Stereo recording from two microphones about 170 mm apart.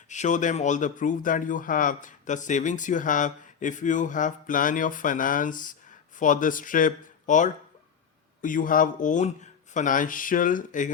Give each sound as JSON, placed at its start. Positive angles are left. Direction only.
{"t": 0.1, "sound": "speech", "side_deg": 45}